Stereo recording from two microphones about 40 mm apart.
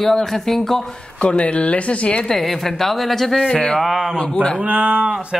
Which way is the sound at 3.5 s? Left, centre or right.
Left.